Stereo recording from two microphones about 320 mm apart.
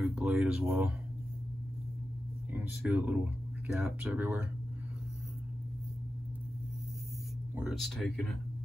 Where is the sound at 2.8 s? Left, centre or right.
Centre.